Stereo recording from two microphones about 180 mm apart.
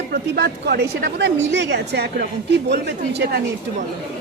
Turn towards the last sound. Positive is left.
turn(degrees=-65)  # may be behind; listen again after turning